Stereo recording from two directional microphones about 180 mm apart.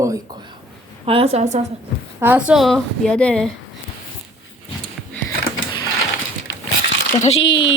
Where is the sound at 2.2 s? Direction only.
10° right (ahead or behind).